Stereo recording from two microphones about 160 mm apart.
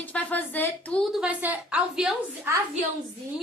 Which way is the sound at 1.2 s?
10° right (ahead or behind).